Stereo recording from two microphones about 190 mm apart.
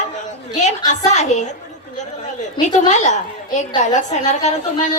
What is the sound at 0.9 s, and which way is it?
Speech, 40° left (ahead or behind).